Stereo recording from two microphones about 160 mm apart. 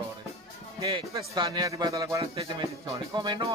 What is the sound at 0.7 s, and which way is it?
Speech, 25° right (ahead or behind).